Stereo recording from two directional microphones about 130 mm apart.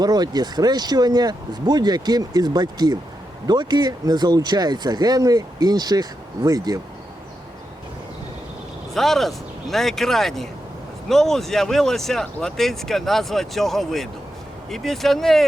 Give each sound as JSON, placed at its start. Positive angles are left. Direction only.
{"t": 0.0, "sound": "speech", "side_deg": -30}
{"t": 9.0, "sound": "speech", "side_deg": 0}